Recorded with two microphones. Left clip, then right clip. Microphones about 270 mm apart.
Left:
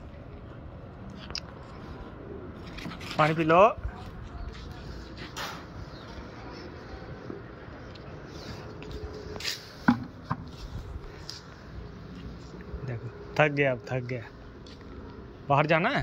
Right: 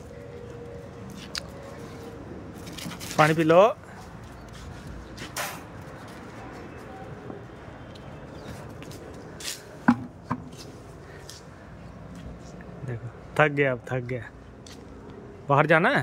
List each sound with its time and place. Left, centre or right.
3.2 s speech: right
9.4 s chopping: left
12.8 s a sound: centre
15.4 s a man's voice: centre